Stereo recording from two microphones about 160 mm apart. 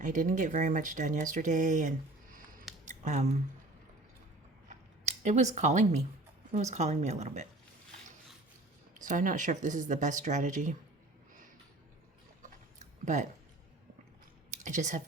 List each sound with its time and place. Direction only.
0.0 s speech: 55° right (ahead or behind)
4.7 s a sound: 45° right (ahead or behind)
6.5 s speech: 45° right (ahead or behind)
9.0 s speech: 55° right (ahead or behind)
14.6 s speech: 50° right (ahead or behind)